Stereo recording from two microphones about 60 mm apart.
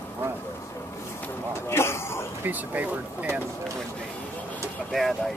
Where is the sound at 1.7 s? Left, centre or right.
Left.